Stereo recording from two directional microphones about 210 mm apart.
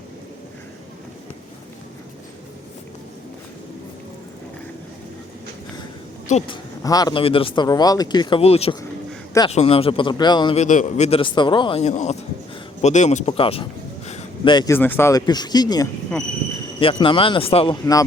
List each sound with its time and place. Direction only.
6.2 s a woman's voice: 30° left (ahead or behind)
6.8 s speech: 20° left (ahead or behind)
10.6 s speech: 35° left (ahead or behind)
12.8 s a sound: 35° left (ahead or behind)
14.5 s speech: 15° left (ahead or behind)